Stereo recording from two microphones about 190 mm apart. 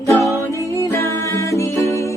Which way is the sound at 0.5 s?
15° left (ahead or behind).